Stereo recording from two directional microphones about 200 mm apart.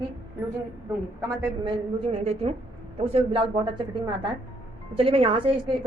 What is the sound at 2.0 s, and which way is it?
A woman's voice, 30° right (ahead or behind).